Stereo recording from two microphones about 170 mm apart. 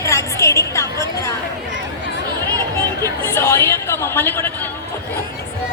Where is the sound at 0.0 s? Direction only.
20° left (ahead or behind).